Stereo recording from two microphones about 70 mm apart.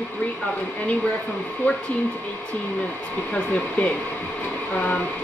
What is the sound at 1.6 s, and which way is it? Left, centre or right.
Speech, left.